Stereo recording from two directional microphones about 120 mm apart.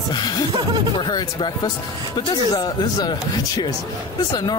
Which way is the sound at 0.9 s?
35° left (ahead or behind).